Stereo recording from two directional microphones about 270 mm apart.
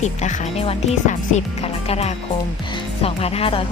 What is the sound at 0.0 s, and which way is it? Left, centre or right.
Speech, left.